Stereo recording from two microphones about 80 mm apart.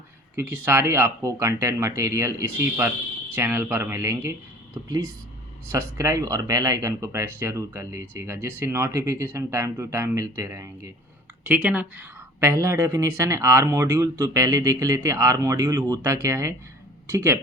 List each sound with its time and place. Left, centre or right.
0.3 s speech: right
11.4 s speech: centre
12.4 s speech: right